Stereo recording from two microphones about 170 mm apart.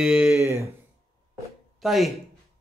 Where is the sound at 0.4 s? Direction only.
15° right (ahead or behind).